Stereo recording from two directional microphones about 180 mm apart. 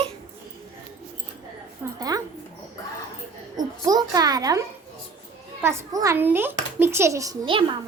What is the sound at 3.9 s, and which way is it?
A child's voice, 20° right (ahead or behind).